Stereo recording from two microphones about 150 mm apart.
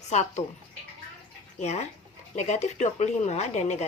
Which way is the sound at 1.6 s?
50° left (ahead or behind).